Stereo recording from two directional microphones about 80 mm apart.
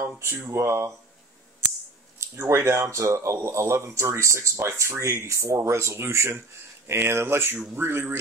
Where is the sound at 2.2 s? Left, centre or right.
Right.